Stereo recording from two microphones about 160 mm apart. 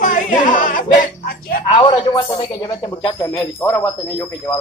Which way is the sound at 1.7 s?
30° left (ahead or behind).